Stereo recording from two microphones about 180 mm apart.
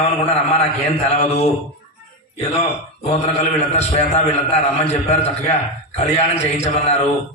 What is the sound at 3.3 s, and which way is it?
A man's voice, 35° left (ahead or behind).